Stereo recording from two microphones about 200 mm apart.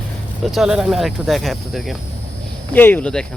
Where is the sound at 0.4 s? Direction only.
Centre (ahead or behind).